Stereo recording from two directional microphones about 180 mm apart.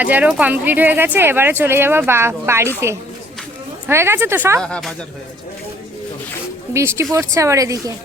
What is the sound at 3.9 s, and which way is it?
Speech, 15° right (ahead or behind).